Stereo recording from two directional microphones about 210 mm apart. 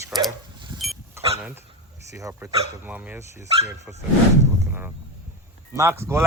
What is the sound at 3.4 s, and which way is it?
Speech, 35° left (ahead or behind).